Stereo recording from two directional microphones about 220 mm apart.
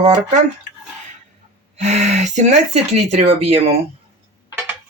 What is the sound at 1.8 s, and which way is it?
Speech, 30° right (ahead or behind).